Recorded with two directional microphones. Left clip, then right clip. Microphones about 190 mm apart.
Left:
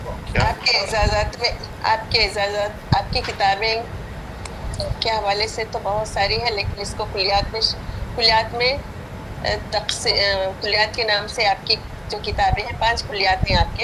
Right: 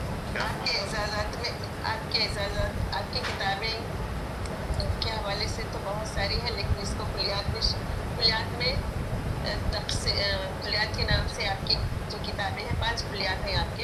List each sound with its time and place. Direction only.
0.3 s a sound: 45° left (ahead or behind)
2.9 s a woman's voice: 45° left (ahead or behind)
4.8 s a woman's voice: 45° left (ahead or behind)